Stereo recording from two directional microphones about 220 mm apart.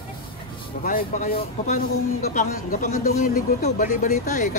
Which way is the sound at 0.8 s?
35° left (ahead or behind).